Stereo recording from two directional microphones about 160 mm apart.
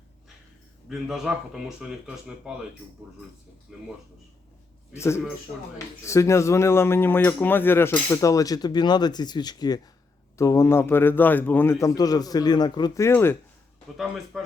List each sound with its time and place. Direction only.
0.9 s speech: centre (ahead or behind)
3.7 s speech: centre (ahead or behind)
4.9 s a man's voice: 15° left (ahead or behind)
13.9 s speech: centre (ahead or behind)